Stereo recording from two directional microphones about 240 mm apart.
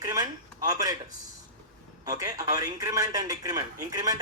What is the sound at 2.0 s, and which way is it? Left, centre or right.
Speech, centre.